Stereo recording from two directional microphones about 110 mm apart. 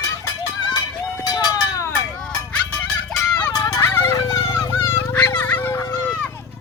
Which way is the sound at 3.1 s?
10° left (ahead or behind).